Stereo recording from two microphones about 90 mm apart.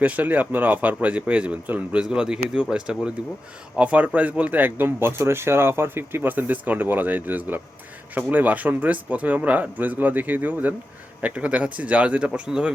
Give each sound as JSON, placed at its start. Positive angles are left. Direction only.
{"t": 0.0, "sound": "speech", "side_deg": -15}